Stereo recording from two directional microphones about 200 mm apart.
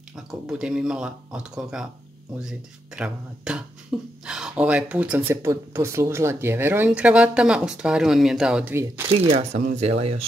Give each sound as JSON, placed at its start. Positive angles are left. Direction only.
{"t": 0.1, "sound": "speech", "side_deg": -5}
{"t": 2.4, "sound": "speech", "side_deg": -5}
{"t": 9.2, "sound": "speech", "side_deg": -30}